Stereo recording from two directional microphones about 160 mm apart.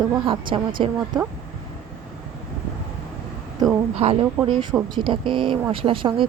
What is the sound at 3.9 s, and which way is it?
A woman's voice, 40° right (ahead or behind).